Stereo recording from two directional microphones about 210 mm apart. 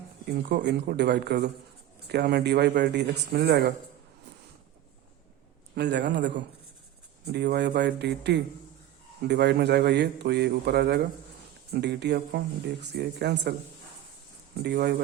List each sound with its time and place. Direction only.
0.4 s speech: 55° right (ahead or behind)
5.7 s a man's voice: 55° right (ahead or behind)
14.6 s speech: 50° right (ahead or behind)